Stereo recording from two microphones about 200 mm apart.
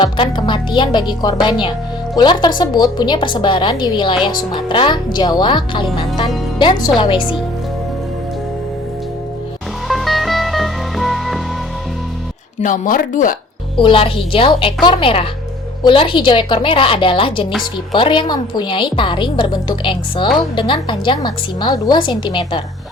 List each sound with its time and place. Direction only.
0.0 s a woman's voice: 25° left (ahead or behind)
9.9 s music: centre (ahead or behind)
12.5 s speech: 40° left (ahead or behind)
13.7 s a woman's voice: 25° left (ahead or behind)